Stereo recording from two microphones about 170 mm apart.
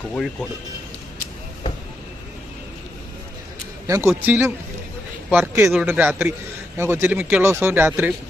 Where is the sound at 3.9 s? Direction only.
15° right (ahead or behind).